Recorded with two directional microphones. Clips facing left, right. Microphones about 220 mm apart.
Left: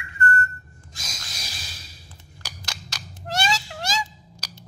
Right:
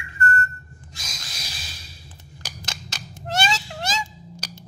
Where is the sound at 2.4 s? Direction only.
20° right (ahead or behind).